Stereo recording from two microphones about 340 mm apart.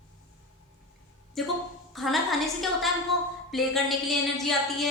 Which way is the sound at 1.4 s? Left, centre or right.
Centre.